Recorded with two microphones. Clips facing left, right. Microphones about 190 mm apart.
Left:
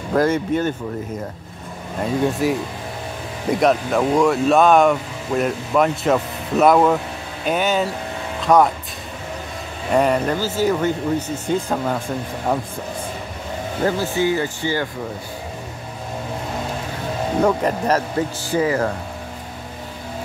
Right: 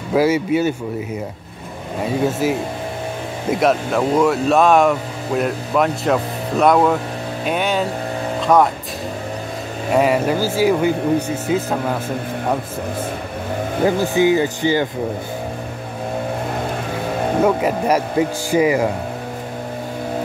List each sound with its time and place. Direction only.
0.1 s speech: 5° right (ahead or behind)
2.0 s speech: 5° right (ahead or behind)
9.9 s speech: 5° right (ahead or behind)
13.8 s speech: 15° right (ahead or behind)
17.4 s speech: 5° right (ahead or behind)